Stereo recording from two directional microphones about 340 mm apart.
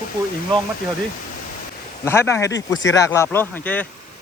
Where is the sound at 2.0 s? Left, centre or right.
Centre.